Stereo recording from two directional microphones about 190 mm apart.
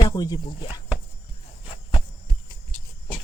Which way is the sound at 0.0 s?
20° left (ahead or behind).